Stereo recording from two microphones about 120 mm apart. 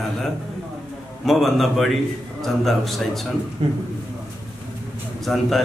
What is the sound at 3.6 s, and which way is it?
Speech, 60° right (ahead or behind).